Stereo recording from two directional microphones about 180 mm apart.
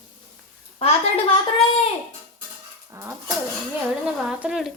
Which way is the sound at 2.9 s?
15° right (ahead or behind).